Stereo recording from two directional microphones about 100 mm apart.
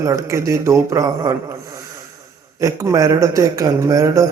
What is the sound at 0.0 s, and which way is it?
A man's voice, 30° right (ahead or behind).